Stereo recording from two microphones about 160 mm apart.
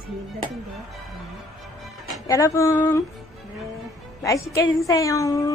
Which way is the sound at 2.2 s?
20° left (ahead or behind).